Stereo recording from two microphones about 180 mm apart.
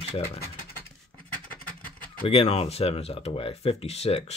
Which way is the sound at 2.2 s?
35° left (ahead or behind).